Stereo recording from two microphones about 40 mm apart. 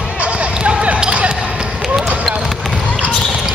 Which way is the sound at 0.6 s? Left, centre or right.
Right.